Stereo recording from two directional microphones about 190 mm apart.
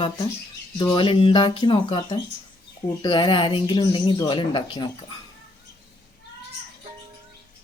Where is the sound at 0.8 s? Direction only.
25° left (ahead or behind).